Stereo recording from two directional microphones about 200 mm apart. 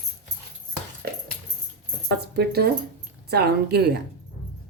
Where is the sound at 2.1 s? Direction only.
50° right (ahead or behind).